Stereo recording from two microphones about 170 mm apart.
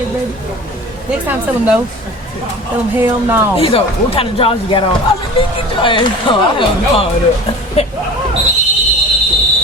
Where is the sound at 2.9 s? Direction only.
10° right (ahead or behind).